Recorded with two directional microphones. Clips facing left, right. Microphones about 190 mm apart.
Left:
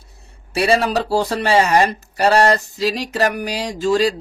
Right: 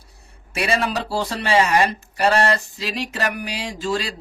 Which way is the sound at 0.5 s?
35° left (ahead or behind).